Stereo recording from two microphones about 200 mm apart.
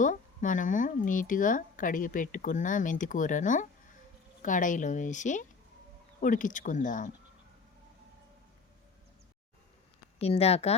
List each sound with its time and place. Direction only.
0.0 s speech: 40° left (ahead or behind)
10.2 s speech: 30° left (ahead or behind)